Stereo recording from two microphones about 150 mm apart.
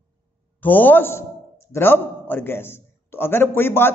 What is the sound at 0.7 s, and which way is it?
A man's voice, 10° left (ahead or behind).